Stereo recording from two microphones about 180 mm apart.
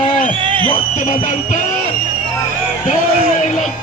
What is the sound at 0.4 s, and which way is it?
Music, 30° right (ahead or behind).